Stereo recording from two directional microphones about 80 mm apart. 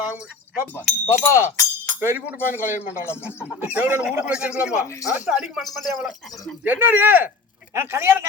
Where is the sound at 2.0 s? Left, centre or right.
Right.